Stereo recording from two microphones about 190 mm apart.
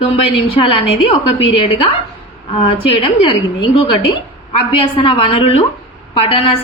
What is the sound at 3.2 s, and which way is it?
A woman's voice, 30° left (ahead or behind).